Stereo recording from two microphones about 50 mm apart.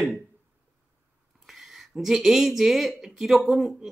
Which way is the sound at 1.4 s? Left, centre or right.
Centre.